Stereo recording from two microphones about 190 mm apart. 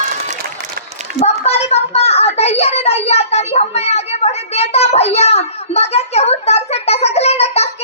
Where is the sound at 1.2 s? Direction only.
35° left (ahead or behind).